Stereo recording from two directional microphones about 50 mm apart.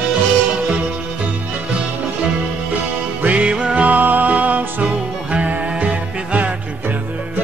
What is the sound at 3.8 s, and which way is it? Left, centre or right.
Music, right.